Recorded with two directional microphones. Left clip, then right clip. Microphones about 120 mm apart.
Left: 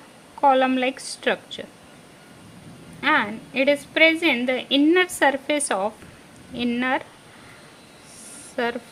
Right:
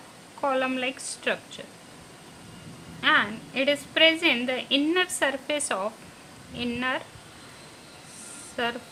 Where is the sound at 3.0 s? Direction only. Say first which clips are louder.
Left 2 dB; 60° left (ahead or behind).